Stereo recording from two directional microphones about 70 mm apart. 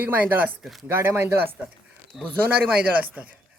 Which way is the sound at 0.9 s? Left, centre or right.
Right.